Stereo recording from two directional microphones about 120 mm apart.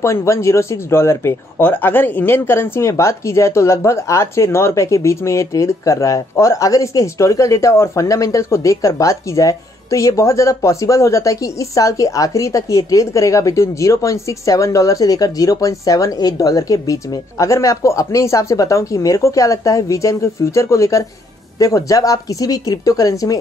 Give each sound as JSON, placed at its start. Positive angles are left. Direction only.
{"t": 0.0, "sound": "speech", "side_deg": 25}